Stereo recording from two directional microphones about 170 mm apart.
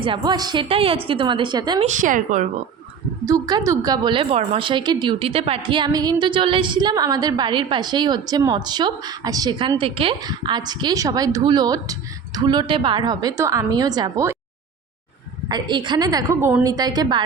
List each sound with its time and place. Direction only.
0.0 s a woman's voice: 25° right (ahead or behind)
1.8 s a woman's voice: 45° right (ahead or behind)
3.2 s a woman's voice: 20° right (ahead or behind)
15.4 s a woman's voice: 25° right (ahead or behind)